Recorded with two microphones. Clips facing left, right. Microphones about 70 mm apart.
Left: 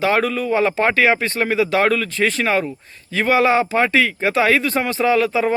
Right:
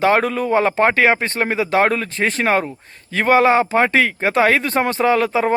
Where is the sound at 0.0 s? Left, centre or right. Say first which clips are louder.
Right 2 dB; right.